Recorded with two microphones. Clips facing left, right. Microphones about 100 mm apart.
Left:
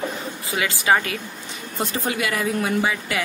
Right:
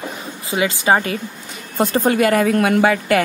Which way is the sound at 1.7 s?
50° right (ahead or behind).